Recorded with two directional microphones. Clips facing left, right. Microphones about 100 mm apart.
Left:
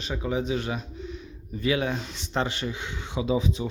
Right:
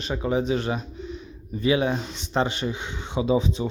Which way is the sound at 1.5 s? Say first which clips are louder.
Right 4 dB; 25° right (ahead or behind).